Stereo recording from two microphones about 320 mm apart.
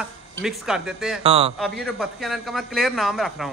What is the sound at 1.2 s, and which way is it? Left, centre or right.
Speech, centre.